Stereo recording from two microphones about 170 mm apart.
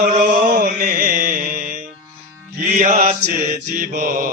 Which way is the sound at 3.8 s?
55° right (ahead or behind).